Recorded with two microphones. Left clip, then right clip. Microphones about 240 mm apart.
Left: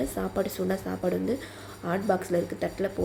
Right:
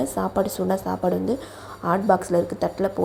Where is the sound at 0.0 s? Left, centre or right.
Centre.